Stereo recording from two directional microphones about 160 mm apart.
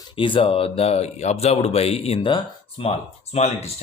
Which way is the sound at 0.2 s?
35° left (ahead or behind).